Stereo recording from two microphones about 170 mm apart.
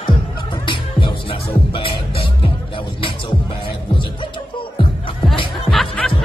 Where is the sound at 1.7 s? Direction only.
30° left (ahead or behind).